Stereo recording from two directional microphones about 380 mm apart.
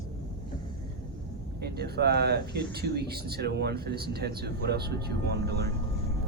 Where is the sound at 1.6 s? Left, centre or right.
Right.